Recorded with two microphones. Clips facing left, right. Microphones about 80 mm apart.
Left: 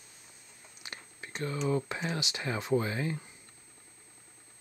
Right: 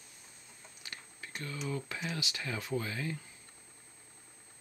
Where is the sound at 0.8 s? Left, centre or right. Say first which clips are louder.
Left 3 dB; left.